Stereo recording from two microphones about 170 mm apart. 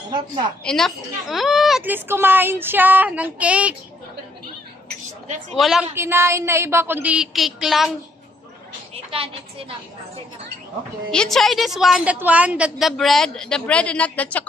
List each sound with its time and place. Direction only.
0.7 s a woman's voice: centre (ahead or behind)
5.5 s a woman's voice: centre (ahead or behind)
5.9 s a woman's voice: 15° right (ahead or behind)
9.1 s a woman's voice: 35° right (ahead or behind)
11.1 s a woman's voice: 5° left (ahead or behind)